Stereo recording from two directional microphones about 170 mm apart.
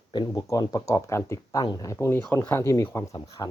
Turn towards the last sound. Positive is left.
turn(degrees=20)  # may be behind; listen again after turning